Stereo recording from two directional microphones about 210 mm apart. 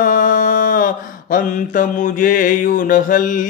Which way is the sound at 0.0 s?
40° left (ahead or behind).